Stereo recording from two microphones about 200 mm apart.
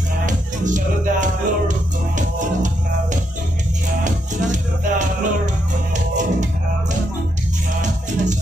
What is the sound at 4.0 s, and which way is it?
Music, 40° right (ahead or behind).